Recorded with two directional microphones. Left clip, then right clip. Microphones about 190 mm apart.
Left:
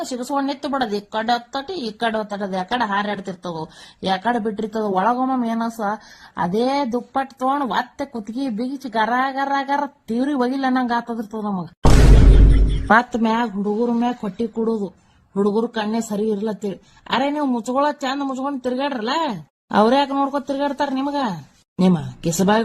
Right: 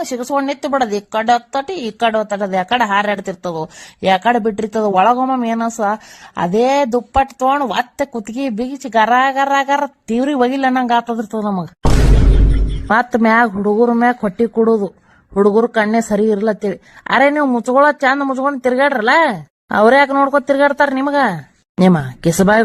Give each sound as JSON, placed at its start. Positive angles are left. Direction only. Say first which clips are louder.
{"t": 0.0, "sound": "a woman's voice", "louder": "right 5 dB", "side_deg": -30}
{"t": 11.8, "sound": "music", "louder": "left 2 dB", "side_deg": 0}
{"t": 13.1, "sound": "a woman's voice", "louder": "right 9 dB", "side_deg": -30}